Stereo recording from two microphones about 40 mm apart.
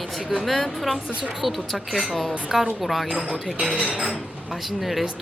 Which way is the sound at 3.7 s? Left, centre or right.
Right.